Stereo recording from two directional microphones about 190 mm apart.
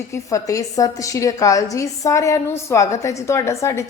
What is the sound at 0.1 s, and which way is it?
A woman's voice, 15° left (ahead or behind).